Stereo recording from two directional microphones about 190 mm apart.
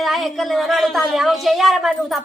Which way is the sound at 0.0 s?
Centre (ahead or behind).